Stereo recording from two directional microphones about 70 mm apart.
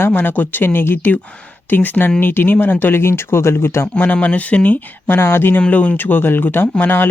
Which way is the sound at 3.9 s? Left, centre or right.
Left.